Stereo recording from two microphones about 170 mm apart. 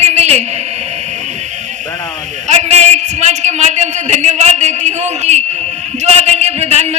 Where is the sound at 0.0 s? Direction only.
40° right (ahead or behind).